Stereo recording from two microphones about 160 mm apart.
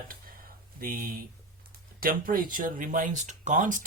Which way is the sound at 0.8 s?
60° right (ahead or behind).